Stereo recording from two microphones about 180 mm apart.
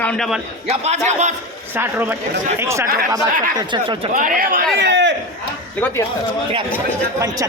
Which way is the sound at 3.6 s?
25° right (ahead or behind).